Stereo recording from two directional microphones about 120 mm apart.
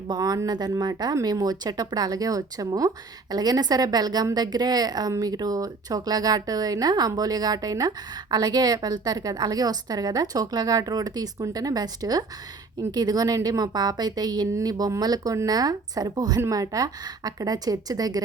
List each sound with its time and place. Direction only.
0.1 s speech: 35° right (ahead or behind)